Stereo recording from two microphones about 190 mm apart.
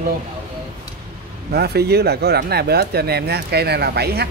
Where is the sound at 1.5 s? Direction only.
60° right (ahead or behind).